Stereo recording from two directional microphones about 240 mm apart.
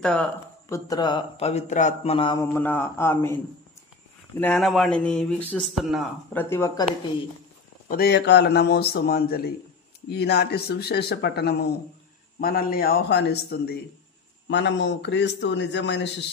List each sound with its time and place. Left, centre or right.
0.0 s speech: centre; by 2.4 s left
2.4 s a man's voice: centre
4.4 s speech: centre
7.9 s a man's voice: left